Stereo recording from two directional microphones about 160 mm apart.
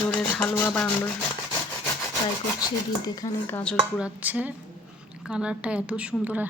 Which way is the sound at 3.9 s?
10° right (ahead or behind).